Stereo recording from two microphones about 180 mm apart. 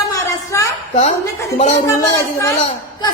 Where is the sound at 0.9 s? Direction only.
40° left (ahead or behind).